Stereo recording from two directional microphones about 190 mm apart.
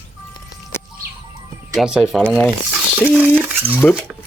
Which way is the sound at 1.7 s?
Centre (ahead or behind).